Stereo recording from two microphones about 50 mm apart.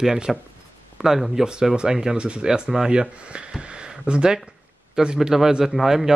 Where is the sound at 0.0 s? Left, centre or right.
Centre.